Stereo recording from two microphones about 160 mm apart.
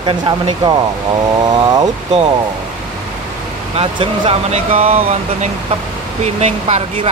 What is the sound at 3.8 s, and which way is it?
Speech, 40° right (ahead or behind).